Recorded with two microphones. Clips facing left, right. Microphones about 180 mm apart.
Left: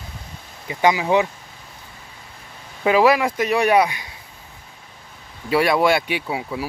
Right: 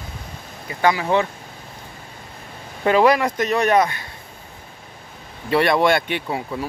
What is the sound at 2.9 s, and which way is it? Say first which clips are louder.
Speech: even; 5° left (ahead or behind).